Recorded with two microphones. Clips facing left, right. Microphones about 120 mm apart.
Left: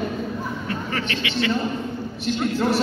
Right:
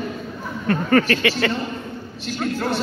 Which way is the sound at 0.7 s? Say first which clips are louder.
Right 13 dB; 55° right (ahead or behind).